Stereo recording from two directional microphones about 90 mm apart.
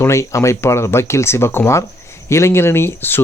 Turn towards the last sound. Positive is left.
turn(degrees=25)  # may be behind; listen again after turning